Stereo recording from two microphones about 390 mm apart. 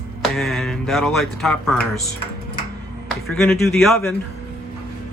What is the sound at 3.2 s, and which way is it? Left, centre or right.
Speech, centre.